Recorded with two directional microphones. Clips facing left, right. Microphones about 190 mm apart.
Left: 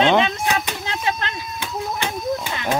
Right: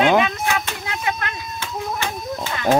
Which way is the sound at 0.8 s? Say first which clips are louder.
Left 1 dB; 30° left (ahead or behind).